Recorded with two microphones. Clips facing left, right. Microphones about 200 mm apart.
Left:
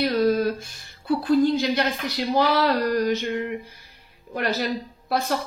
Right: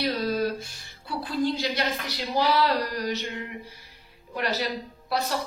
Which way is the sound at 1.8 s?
50° left (ahead or behind).